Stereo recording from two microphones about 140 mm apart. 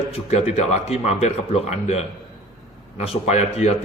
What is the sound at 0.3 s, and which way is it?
Speech, 50° left (ahead or behind).